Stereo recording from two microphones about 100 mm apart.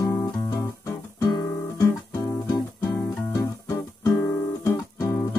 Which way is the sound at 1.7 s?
35° left (ahead or behind).